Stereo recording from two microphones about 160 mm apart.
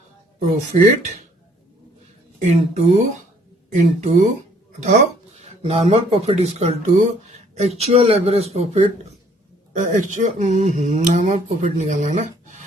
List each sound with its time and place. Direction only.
0.7 s speech: 50° right (ahead or behind)
2.4 s speech: 45° right (ahead or behind)
5.4 s speech: 40° right (ahead or behind)